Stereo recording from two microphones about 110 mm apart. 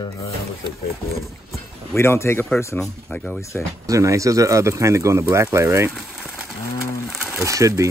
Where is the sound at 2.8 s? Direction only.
5° left (ahead or behind).